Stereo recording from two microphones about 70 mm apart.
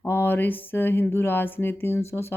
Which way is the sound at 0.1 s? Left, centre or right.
Left.